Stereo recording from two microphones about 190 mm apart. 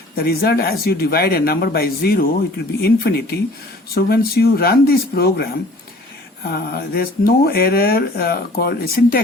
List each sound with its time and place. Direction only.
0.2 s speech: 55° left (ahead or behind)
6.5 s speech: 55° left (ahead or behind)